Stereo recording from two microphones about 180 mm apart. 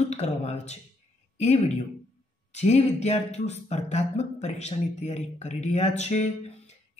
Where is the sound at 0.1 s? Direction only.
35° left (ahead or behind).